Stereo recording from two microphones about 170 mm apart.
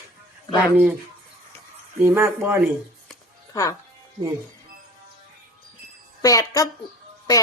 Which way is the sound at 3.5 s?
20° left (ahead or behind).